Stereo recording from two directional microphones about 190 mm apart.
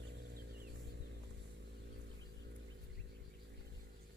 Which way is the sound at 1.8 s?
65° right (ahead or behind).